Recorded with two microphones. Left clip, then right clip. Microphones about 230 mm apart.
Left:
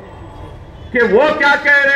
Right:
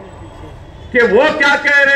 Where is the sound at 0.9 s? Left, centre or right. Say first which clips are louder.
Right 1 dB; right.